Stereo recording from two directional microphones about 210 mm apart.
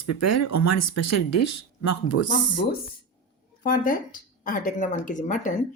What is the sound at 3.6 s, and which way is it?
Speech, 40° left (ahead or behind).